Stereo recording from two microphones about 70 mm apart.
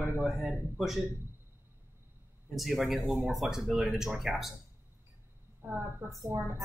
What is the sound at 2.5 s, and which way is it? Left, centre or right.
Speech, centre.